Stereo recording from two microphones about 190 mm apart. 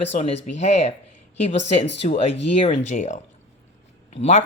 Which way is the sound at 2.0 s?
40° left (ahead or behind).